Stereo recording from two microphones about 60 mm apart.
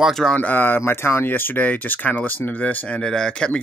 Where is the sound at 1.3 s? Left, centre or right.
Left.